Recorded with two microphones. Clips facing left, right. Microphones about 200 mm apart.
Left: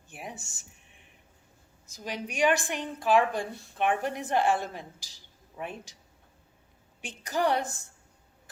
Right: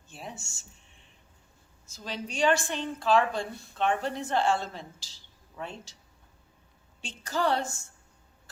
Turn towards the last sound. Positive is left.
turn(degrees=15)  # may be behind; listen again after turning